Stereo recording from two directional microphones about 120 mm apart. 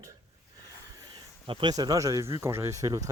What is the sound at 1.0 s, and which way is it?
Speech, 40° right (ahead or behind).